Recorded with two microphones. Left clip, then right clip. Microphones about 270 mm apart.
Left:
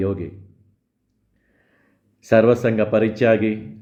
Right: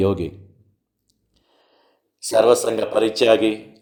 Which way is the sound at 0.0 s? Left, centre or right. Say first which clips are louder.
Right 4 dB; centre.